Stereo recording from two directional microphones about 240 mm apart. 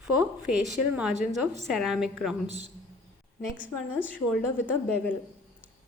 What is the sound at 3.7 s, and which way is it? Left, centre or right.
Speech, left.